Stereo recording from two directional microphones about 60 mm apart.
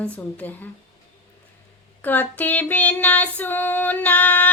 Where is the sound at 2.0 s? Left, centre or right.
Left.